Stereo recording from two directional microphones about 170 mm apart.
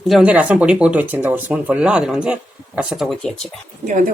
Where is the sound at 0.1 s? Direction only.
5° right (ahead or behind).